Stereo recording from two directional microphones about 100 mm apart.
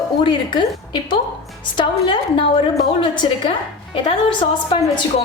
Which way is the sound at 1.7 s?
55° left (ahead or behind).